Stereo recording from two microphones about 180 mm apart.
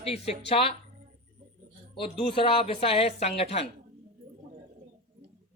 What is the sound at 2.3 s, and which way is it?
A man's voice, 30° left (ahead or behind).